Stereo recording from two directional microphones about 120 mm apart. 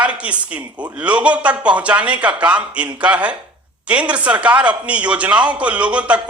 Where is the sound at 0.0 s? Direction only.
10° right (ahead or behind).